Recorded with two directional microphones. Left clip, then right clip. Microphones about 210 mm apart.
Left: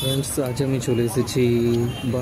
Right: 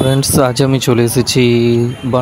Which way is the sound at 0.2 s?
45° right (ahead or behind).